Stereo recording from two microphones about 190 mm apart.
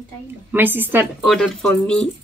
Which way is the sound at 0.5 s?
10° right (ahead or behind).